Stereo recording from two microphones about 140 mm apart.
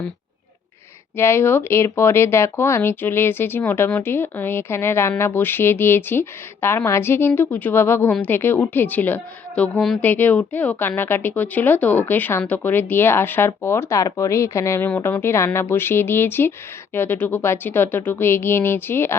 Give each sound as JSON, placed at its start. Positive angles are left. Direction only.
{"t": 1.1, "sound": "speech", "side_deg": 15}
{"t": 9.7, "sound": "a woman's voice", "side_deg": 0}
{"t": 10.0, "sound": "speech", "side_deg": 15}